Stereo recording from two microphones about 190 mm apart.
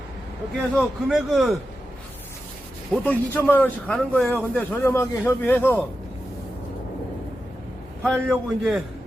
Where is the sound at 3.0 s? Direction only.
10° left (ahead or behind).